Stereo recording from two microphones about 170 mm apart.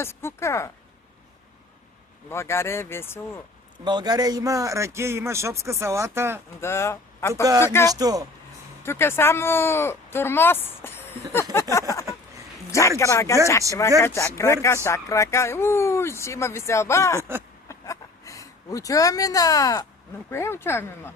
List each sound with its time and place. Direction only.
0.0 s speech: 15° left (ahead or behind)
2.3 s speech: 15° left (ahead or behind)
3.8 s a man's voice: 25° right (ahead or behind)
6.6 s speech: 15° left (ahead or behind)
7.9 s a man's voice: 20° right (ahead or behind)
8.8 s speech: 15° left (ahead or behind)
11.7 s a sound: 15° left (ahead or behind)
13.0 s speech: 15° left (ahead or behind)
17.2 s a man's voice: 15° right (ahead or behind)
17.7 s a sound: 20° left (ahead or behind)
20.3 s speech: 15° left (ahead or behind)